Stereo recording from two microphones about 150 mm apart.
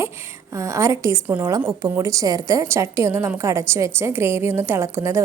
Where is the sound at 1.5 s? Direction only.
25° right (ahead or behind).